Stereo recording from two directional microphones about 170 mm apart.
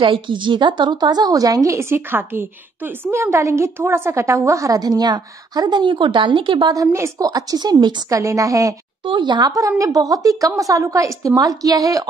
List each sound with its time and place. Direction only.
0.0 s a woman's voice: 30° right (ahead or behind)